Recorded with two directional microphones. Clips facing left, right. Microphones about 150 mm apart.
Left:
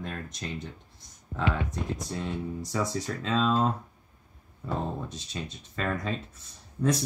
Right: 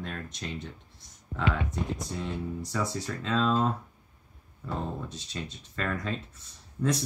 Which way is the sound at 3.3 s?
15° left (ahead or behind).